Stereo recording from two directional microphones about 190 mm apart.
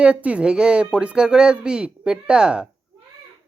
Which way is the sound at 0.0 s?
5° right (ahead or behind).